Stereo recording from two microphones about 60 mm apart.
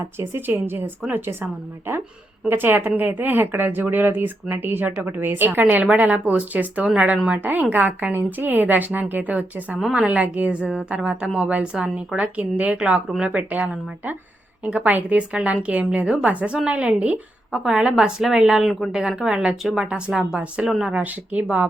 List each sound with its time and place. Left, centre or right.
0.2 s a woman's voice: right
2.5 s a woman's voice: right; by 13.4 s centre
13.5 s a woman's voice: right
17.5 s a woman's voice: centre
20.9 s a woman's voice: right